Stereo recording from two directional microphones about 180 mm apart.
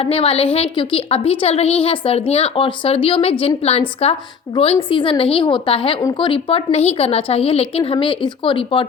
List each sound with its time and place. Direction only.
0.0 s a woman's voice: 35° left (ahead or behind)